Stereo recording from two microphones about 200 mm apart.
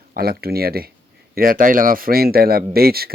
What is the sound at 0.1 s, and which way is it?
Speech, 50° right (ahead or behind).